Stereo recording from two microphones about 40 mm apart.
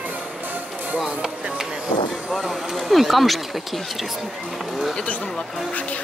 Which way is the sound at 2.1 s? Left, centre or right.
Centre.